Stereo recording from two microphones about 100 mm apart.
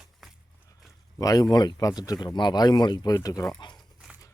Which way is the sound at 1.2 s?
40° left (ahead or behind).